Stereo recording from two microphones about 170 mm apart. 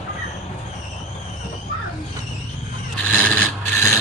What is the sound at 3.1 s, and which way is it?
Filing, 10° left (ahead or behind).